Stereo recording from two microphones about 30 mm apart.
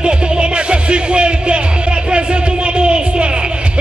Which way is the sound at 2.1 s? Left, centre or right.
Right.